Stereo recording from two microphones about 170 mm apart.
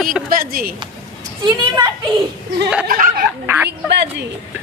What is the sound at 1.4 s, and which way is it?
Speech, 25° right (ahead or behind).